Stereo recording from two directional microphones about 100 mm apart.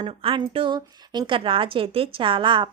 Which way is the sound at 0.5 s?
50° right (ahead or behind).